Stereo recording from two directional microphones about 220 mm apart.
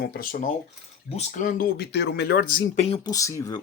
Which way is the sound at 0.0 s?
45° left (ahead or behind).